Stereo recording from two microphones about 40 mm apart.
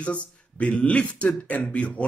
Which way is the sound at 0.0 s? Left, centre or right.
Left.